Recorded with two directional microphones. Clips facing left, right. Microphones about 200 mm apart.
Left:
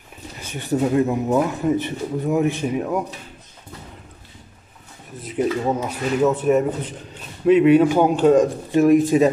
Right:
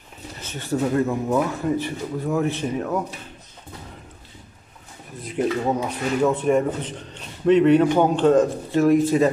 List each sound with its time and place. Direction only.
0.4 s speech: 15° left (ahead or behind)
5.2 s speech: centre (ahead or behind)